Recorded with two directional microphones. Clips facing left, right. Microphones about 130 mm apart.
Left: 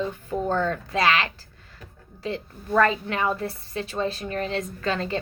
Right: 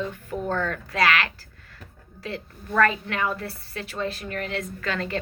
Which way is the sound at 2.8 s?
25° left (ahead or behind).